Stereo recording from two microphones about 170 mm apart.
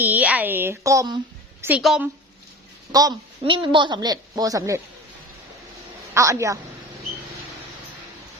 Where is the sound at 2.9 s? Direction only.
20° right (ahead or behind).